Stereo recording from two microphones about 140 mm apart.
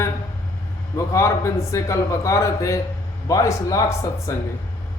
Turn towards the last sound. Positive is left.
turn(degrees=20)  # may be behind; listen again after turning